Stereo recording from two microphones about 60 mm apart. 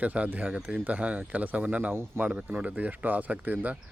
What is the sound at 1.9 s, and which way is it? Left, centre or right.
Speech, right.